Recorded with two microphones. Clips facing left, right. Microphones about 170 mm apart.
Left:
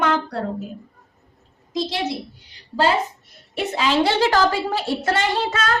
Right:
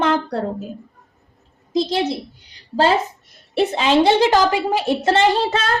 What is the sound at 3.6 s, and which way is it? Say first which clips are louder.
A woman's voice: right 4 dB; 25° right (ahead or behind).